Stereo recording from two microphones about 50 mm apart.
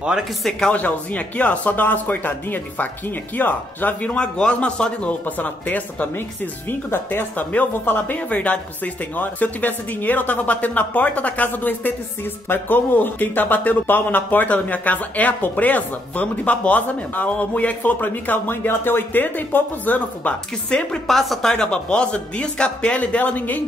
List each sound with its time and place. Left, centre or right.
0.5 s speech: centre
0.7 s a man's voice: left
4.1 s speech: left
5.2 s a man's voice: left
6.7 s a man's voice: left
20.7 s speech: left
21.1 s speech: centre
22.9 s a man's voice: left